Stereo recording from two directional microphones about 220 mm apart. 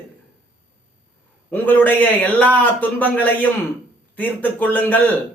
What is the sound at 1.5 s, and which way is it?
A man's voice, 10° left (ahead or behind).